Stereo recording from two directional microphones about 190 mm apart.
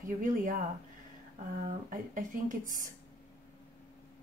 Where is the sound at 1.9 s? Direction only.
45° right (ahead or behind).